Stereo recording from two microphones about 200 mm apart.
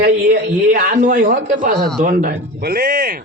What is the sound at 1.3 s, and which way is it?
A man's voice, 50° right (ahead or behind).